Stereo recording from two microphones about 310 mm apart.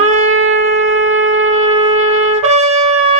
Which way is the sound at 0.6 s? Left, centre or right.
Right.